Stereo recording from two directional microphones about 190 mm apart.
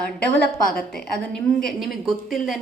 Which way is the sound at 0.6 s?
50° left (ahead or behind).